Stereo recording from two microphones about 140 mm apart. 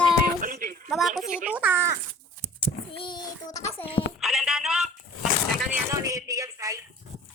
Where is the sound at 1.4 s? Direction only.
10° right (ahead or behind).